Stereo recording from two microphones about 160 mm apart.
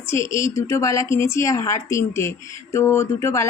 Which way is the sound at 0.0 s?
15° left (ahead or behind).